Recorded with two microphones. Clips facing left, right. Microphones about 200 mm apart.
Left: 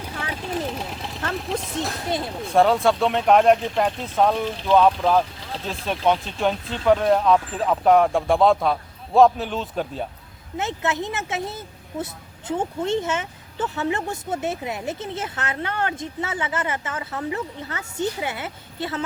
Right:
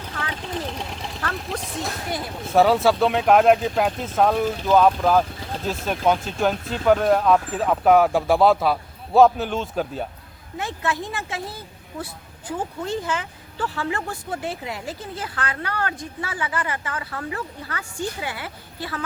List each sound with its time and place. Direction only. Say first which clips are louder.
0.3 s vehicle: left 4 dB; 5° left (ahead or behind)
1.5 s speech: left 5 dB; centre (ahead or behind)
2.0 s speech: left 3 dB; 25° left (ahead or behind)
2.5 s speech: right 1 dB; 5° right (ahead or behind)
10.6 s speech: left 2 dB; 20° left (ahead or behind)